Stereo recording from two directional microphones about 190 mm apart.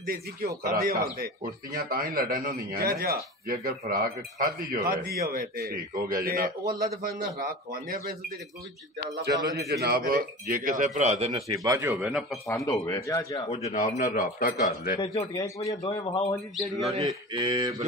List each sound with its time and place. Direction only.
0.0 s a man's voice: 50° right (ahead or behind)
9.7 s a man's voice: 55° right (ahead or behind); by 11.5 s 35° right (ahead or behind)
11.5 s speech: 15° right (ahead or behind)
12.1 s a man's voice: centre (ahead or behind)
12.6 s speech: 15° left (ahead or behind)
13.5 s a man's voice: 35° left (ahead or behind)
14.0 s speech: 50° left (ahead or behind)
15.0 s speech: 30° left (ahead or behind)
15.4 s speech: 20° left (ahead or behind)
16.5 s a man's voice: centre (ahead or behind)
17.0 s mantra: 20° right (ahead or behind)